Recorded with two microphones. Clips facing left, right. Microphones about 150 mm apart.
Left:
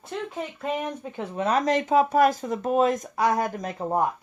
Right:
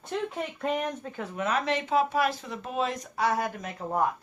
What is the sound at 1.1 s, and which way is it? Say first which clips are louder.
Speech: left 6 dB; 30° left (ahead or behind).